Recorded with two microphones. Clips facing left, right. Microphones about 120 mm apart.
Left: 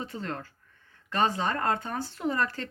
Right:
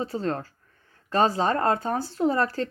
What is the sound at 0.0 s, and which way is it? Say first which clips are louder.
A woman's voice: right 7 dB; 35° right (ahead or behind).